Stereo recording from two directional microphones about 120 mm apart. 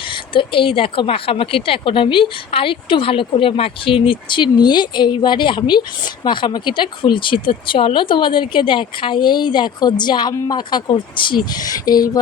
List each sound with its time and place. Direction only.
0.1 s a woman's voice: 45° left (ahead or behind)